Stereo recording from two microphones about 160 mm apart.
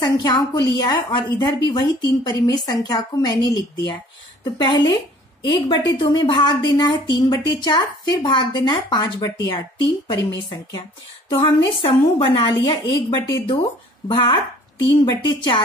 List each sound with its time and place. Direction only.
0.0 s a woman's voice: 25° left (ahead or behind)
5.9 s a woman's voice: 30° left (ahead or behind)